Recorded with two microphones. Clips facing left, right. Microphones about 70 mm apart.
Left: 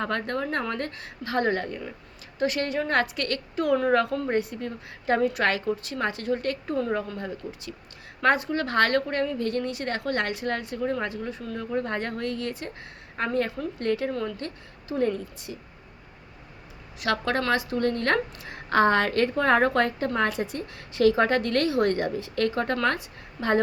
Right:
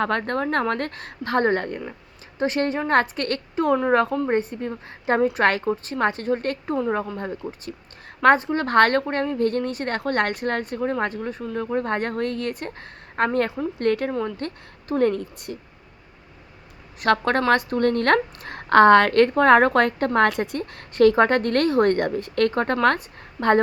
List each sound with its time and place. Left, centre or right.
0.0 s a woman's voice: right
0.7 s a woman's voice: right
2.4 s a woman's voice: right
9.0 s a woman's voice: right
14.1 s speech: right
14.3 s a woman's voice: right
17.0 s a woman's voice: right
20.1 s a woman's voice: right